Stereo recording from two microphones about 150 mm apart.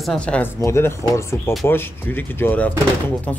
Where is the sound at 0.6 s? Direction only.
20° left (ahead or behind).